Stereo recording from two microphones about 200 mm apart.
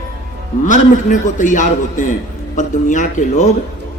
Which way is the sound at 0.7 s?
40° left (ahead or behind).